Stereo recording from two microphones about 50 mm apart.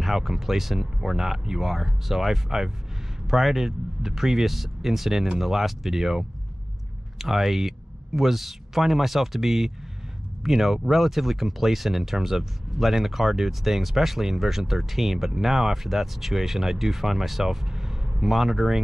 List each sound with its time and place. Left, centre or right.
0.0 s speech: centre